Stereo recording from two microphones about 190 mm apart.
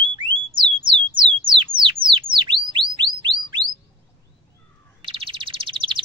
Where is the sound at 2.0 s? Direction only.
25° right (ahead or behind).